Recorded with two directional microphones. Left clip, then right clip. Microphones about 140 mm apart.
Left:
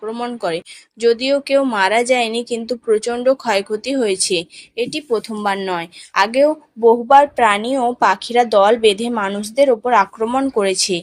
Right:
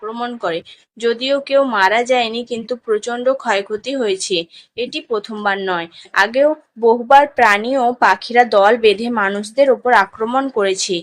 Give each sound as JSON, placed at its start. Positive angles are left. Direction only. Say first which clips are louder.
{"t": 0.0, "sound": "speech", "louder": "even", "side_deg": 50}